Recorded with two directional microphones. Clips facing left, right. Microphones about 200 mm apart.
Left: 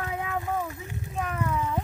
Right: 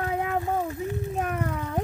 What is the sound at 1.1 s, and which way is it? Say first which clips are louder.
Speech: left 4 dB; 45° right (ahead or behind).